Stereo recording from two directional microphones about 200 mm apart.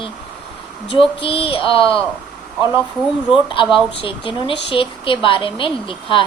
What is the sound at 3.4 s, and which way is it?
Speech, 25° left (ahead or behind).